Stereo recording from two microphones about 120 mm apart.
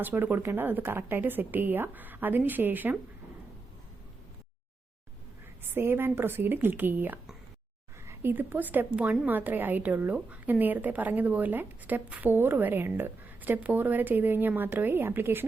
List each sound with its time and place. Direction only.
0.0 s a woman's voice: 15° right (ahead or behind)
5.7 s a woman's voice: 20° right (ahead or behind)